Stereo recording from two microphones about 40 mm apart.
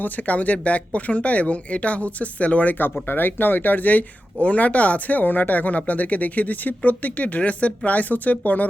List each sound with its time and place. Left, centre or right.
0.0 s speech: left
3.1 s speech: left